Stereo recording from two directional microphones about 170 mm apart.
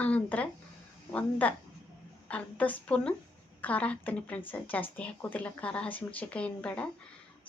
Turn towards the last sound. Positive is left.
turn(degrees=5)  # may be behind; listen again after turning